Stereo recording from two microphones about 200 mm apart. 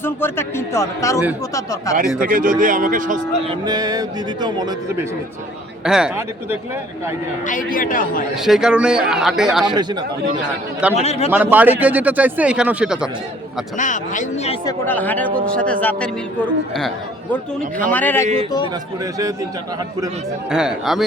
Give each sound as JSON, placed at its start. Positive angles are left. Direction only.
{"t": 0.0, "sound": "a man's voice", "side_deg": 10}
{"t": 2.2, "sound": "speech", "side_deg": -45}
{"t": 3.5, "sound": "speech", "side_deg": -20}
{"t": 5.8, "sound": "a man's voice", "side_deg": -5}
{"t": 7.4, "sound": "speech", "side_deg": 40}
{"t": 8.4, "sound": "a man's voice", "side_deg": 0}
{"t": 10.9, "sound": "speech", "side_deg": 30}
{"t": 11.3, "sound": "speech", "side_deg": -10}
{"t": 13.7, "sound": "speech", "side_deg": 40}
{"t": 14.6, "sound": "a man's voice", "side_deg": 15}
{"t": 20.5, "sound": "a man's voice", "side_deg": -5}